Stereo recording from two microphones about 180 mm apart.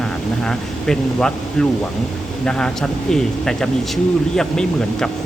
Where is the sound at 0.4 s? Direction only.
5° left (ahead or behind).